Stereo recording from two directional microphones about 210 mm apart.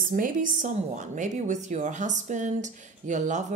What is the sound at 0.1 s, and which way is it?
A woman's voice, 40° right (ahead or behind).